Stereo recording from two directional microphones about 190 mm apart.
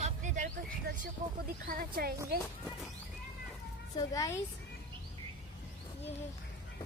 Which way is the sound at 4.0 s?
15° left (ahead or behind).